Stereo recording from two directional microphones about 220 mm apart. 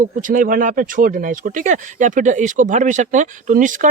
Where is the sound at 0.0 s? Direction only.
35° right (ahead or behind).